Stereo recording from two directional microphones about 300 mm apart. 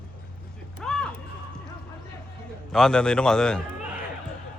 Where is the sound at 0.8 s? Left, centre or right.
Centre.